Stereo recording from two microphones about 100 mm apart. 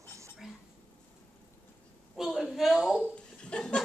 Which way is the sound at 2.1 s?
Centre (ahead or behind).